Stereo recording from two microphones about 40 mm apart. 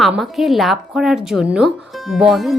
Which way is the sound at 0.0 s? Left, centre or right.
Centre.